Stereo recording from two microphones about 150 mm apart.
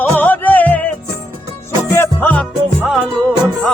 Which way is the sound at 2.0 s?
10° left (ahead or behind).